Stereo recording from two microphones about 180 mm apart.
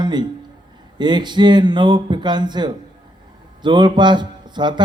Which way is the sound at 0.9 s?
25° right (ahead or behind).